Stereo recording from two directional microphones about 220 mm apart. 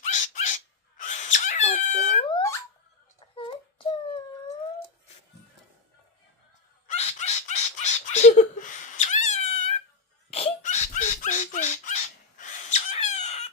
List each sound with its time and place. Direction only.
0.0 s dog: 35° left (ahead or behind)
3.3 s wail: 25° left (ahead or behind)
6.8 s crow: 30° left (ahead or behind)
10.3 s a sound: 30° left (ahead or behind)